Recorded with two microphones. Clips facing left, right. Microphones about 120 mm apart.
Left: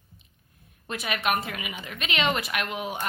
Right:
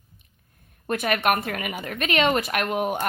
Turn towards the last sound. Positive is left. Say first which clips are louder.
# right 6 dB
turn(degrees=-50)  # may be behind; listen again after turning